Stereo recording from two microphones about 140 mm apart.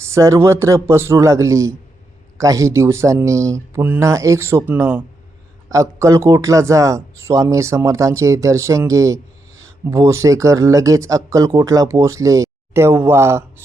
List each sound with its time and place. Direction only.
0.0 s speech: 20° right (ahead or behind)